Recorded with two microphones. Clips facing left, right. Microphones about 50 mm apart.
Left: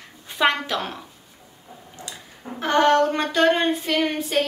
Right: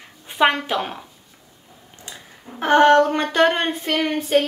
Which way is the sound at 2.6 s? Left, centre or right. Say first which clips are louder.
Right 4 dB; right.